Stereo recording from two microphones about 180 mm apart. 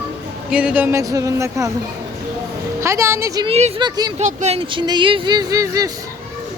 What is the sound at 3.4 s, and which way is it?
Speech, 35° right (ahead or behind).